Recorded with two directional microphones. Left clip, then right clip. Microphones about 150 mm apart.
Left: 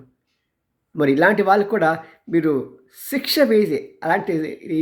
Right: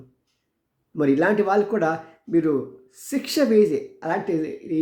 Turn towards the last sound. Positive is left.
turn(degrees=25)  # may be behind; listen again after turning